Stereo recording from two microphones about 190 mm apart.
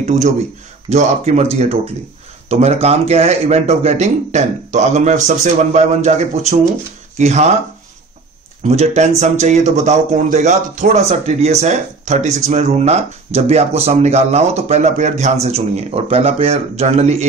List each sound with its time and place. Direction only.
0.0 s speech: 35° right (ahead or behind)
8.6 s speech: 35° right (ahead or behind)